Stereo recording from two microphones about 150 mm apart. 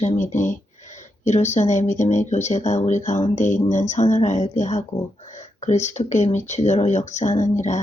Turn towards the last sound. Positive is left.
turn(degrees=55)  # may be behind; listen again after turning